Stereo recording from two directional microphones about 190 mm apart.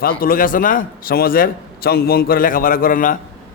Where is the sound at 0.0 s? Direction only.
50° left (ahead or behind).